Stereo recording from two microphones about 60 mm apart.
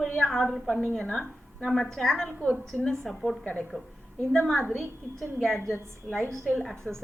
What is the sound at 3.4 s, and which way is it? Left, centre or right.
Speech, centre.